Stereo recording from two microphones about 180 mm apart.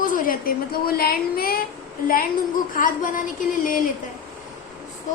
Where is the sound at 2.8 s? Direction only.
50° left (ahead or behind).